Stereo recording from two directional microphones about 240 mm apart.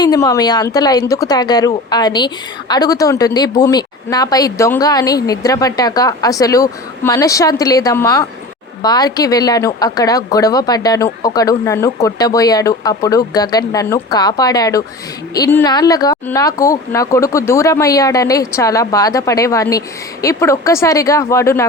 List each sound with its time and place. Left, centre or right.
0.0 s speech: centre